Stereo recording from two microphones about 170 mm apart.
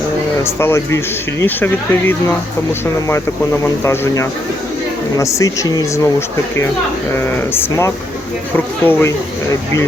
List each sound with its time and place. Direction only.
0.6 s speech: 15° left (ahead or behind)
3.6 s speech: 15° left (ahead or behind)